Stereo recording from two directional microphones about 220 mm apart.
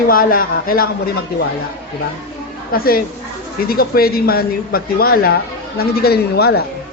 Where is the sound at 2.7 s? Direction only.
40° left (ahead or behind).